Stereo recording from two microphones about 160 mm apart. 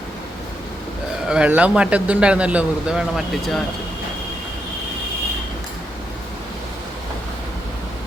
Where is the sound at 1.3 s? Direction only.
10° right (ahead or behind).